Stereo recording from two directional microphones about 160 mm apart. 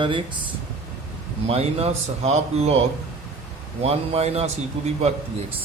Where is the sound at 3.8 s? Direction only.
40° right (ahead or behind).